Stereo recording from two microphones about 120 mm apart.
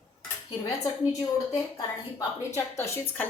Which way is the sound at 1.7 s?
25° left (ahead or behind).